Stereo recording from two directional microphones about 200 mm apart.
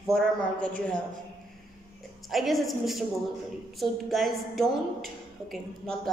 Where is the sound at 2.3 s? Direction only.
Centre (ahead or behind).